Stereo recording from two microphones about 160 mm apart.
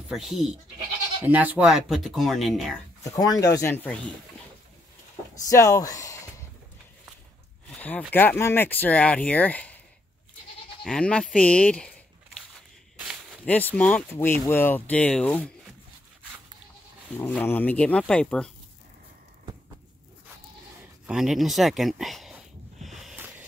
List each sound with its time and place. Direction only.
0.1 s speech: centre (ahead or behind)
3.2 s speech: 25° left (ahead or behind)
3.6 s speech: 10° left (ahead or behind)
5.3 s speech: 20° left (ahead or behind)
8.1 s speech: 10° left (ahead or behind)
10.8 s speech: 5° left (ahead or behind)
12.9 s a sound: 5° right (ahead or behind)
13.5 s speech: 10° left (ahead or behind)
17.3 s speech: 10° left (ahead or behind)
21.1 s speech: 5° right (ahead or behind)
22.8 s a sound: centre (ahead or behind)